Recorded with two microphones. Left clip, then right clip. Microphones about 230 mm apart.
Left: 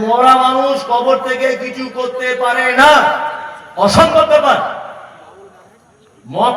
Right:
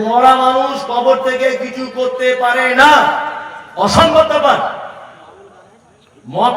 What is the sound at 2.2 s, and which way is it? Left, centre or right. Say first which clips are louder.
A man's voice: right 1 dB; left.